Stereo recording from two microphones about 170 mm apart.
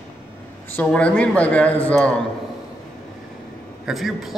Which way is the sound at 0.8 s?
5° left (ahead or behind).